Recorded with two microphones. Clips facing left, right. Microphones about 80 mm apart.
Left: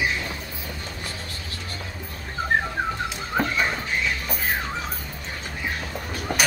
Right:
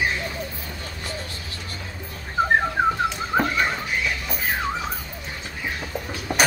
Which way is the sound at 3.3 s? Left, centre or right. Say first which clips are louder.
Right 2 dB; right.